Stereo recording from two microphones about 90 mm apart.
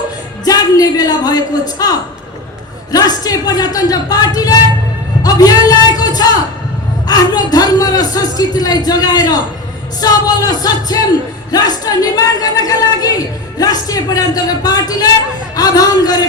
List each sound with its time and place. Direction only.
0.4 s a man's voice: 45° left (ahead or behind)
5.2 s a sound: 45° left (ahead or behind)
7.1 s speech: 45° left (ahead or behind)